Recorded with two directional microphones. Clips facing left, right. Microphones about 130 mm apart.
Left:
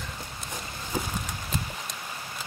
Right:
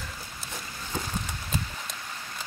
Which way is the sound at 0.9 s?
10° left (ahead or behind).